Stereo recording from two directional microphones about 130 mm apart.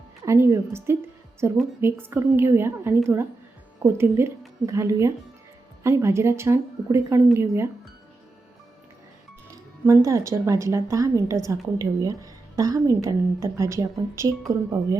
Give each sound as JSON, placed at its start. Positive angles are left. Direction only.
{"t": 0.3, "sound": "a woman's voice", "side_deg": -20}
{"t": 9.5, "sound": "a woman's voice", "side_deg": -20}